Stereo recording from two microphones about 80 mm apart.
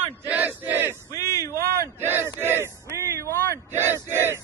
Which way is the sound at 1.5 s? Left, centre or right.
Right.